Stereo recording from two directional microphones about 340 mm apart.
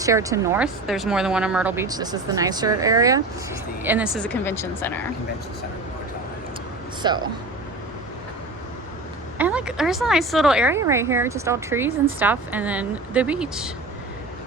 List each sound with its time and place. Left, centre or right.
0.0 s speech: centre
7.0 s speech: centre
9.4 s speech: centre